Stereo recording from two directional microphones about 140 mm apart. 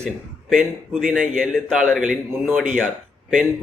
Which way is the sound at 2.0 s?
10° right (ahead or behind).